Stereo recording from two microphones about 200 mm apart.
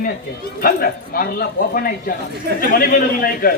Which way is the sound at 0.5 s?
45° left (ahead or behind).